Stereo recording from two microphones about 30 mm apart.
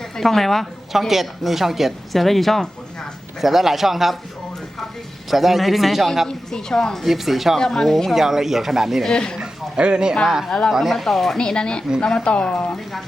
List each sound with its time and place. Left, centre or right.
0.2 s speech: centre
0.9 s speech: centre
2.1 s speech: centre
3.4 s speech: centre
5.3 s speech: centre
6.2 s speech: centre
7.0 s speech: centre
7.6 s speech: centre
8.1 s speech: centre
9.0 s speech: left
9.4 s a sound: right
10.2 s speech: centre
10.9 s speech: centre
11.3 s speech: left